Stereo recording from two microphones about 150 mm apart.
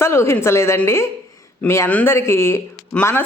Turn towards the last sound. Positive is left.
turn(degrees=10)  # may be behind; listen again after turning